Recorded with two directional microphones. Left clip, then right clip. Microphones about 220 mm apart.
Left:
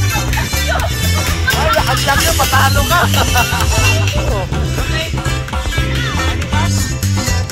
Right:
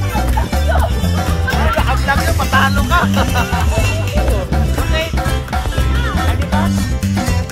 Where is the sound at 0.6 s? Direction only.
40° right (ahead or behind).